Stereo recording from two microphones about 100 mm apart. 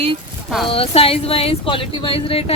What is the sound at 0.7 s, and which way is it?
Speech, 70° left (ahead or behind).